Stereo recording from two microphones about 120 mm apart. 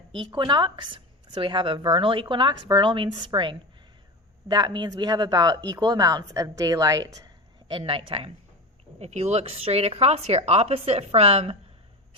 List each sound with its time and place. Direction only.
0.1 s a woman's voice: 40° right (ahead or behind)
7.7 s a woman's voice: 45° right (ahead or behind)
9.0 s a woman's voice: 65° right (ahead or behind)